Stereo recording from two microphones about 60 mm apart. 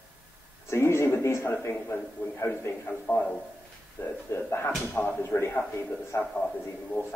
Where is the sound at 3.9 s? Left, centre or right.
Left.